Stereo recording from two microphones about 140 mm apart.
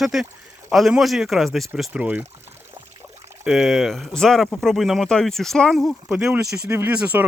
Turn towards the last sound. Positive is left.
turn(degrees=-10)  # may be behind; listen again after turning